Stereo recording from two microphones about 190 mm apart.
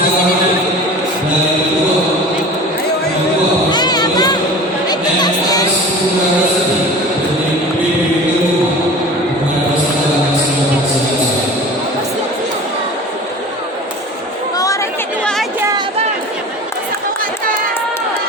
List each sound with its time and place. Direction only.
3.7 s a sound: 20° left (ahead or behind)
4.9 s music: 20° left (ahead or behind)
15.2 s chatter: 5° left (ahead or behind)